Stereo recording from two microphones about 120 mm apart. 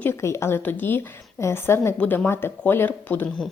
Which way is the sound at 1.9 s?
10° left (ahead or behind).